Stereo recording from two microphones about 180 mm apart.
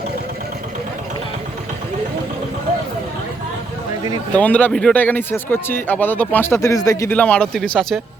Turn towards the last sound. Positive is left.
turn(degrees=5)  # may be behind; listen again after turning